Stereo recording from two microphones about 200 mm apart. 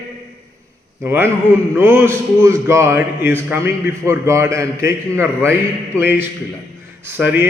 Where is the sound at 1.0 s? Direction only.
10° right (ahead or behind).